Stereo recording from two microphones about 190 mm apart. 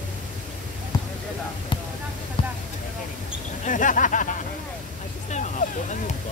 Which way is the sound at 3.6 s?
45° left (ahead or behind).